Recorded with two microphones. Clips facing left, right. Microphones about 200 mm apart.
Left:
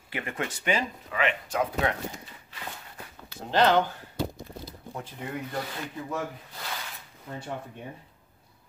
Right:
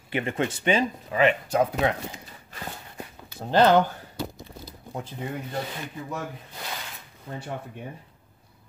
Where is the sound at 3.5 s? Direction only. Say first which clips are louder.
Right 4 dB; 45° right (ahead or behind).